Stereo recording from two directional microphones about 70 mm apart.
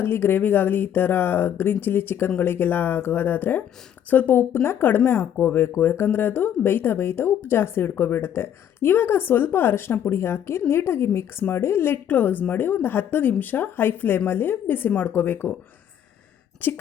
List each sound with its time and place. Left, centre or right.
0.0 s speech: left
16.6 s speech: left